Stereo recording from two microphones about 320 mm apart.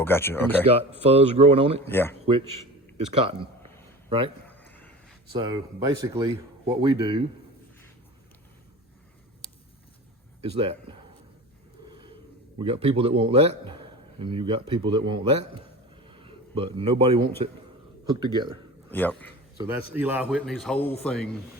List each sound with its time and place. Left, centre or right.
0.0 s speech: centre
0.6 s a man's voice: centre
1.8 s speech: centre
4.4 s a sound: centre
5.3 s a man's voice: centre
10.4 s a man's voice: centre
12.5 s a man's voice: centre
18.9 s speech: centre
19.9 s speech: centre